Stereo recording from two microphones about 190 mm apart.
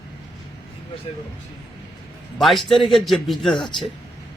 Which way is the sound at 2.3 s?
Centre (ahead or behind).